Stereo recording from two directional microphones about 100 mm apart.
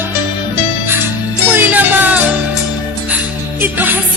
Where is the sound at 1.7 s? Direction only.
15° right (ahead or behind).